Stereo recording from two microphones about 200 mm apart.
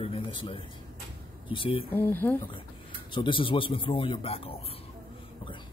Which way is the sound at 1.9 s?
10° left (ahead or behind).